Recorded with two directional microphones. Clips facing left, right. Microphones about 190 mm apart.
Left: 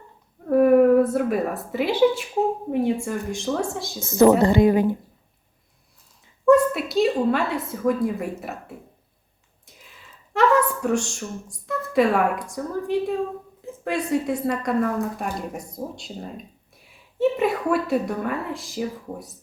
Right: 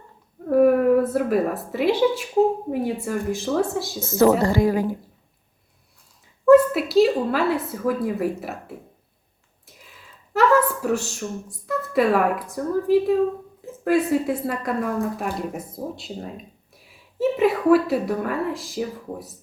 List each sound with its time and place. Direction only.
0.5 s a woman's voice: centre (ahead or behind)
4.0 s a woman's voice: 15° left (ahead or behind)
6.4 s a woman's voice: 5° right (ahead or behind)
9.9 s a woman's voice: 5° right (ahead or behind)